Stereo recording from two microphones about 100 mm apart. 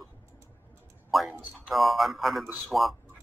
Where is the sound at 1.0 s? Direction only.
Centre (ahead or behind).